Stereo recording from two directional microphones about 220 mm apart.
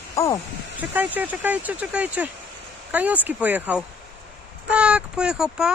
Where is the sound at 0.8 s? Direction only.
5° right (ahead or behind).